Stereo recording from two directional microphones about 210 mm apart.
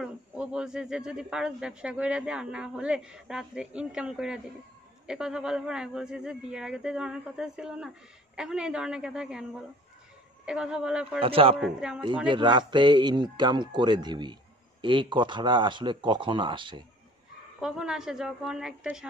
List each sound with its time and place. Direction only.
0.0 s speech: 5° right (ahead or behind)
11.1 s speech: 25° right (ahead or behind)
11.5 s speech: 5° right (ahead or behind)
12.3 s speech: 20° right (ahead or behind)
17.6 s speech: 5° right (ahead or behind)